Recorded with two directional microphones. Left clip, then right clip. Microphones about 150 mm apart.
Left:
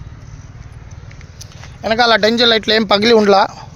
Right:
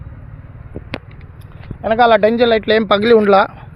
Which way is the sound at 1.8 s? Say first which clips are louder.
Right 1 dB; 20° left (ahead or behind).